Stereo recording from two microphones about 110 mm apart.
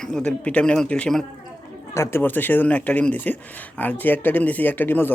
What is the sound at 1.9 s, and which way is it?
Speech, 25° left (ahead or behind).